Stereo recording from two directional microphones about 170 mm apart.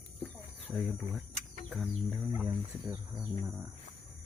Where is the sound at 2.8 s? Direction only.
20° right (ahead or behind).